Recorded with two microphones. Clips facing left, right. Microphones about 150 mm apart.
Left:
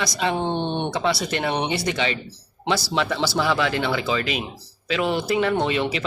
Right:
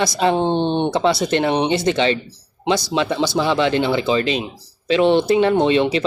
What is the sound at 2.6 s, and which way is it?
Speech, 20° right (ahead or behind).